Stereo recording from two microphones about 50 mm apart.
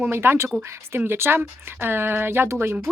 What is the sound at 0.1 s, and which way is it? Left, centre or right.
Speech, right.